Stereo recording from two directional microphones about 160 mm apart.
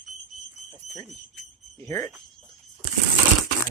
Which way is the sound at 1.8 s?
20° left (ahead or behind).